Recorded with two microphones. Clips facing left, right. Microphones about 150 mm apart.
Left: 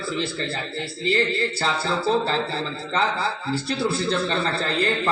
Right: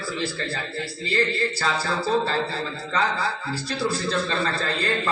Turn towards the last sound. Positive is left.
turn(degrees=25)  # may be behind; listen again after turning